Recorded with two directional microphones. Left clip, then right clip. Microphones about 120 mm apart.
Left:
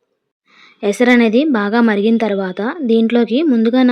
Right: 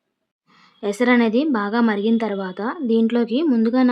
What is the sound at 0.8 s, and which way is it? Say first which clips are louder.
Speech: left 6 dB; 35° left (ahead or behind).